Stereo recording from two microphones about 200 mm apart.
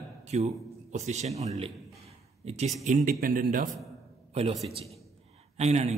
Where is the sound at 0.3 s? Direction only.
35° right (ahead or behind).